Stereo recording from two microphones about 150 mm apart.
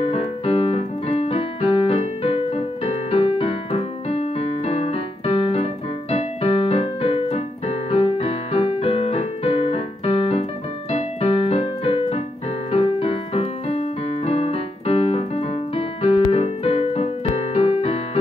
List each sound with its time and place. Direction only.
0.0 s keyboard: 40° left (ahead or behind)